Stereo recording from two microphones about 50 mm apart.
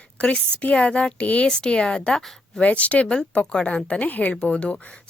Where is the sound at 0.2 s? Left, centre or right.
Left.